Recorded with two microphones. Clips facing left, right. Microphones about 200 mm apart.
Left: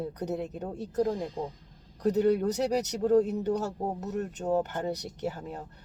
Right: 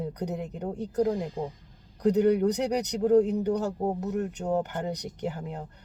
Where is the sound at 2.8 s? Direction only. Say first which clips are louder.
Right 3 dB; 15° right (ahead or behind).